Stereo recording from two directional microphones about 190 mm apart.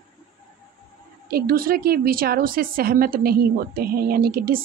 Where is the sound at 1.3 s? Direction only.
50° right (ahead or behind).